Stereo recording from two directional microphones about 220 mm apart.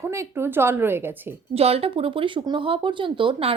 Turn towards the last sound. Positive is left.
turn(degrees=-25)  # may be behind; listen again after turning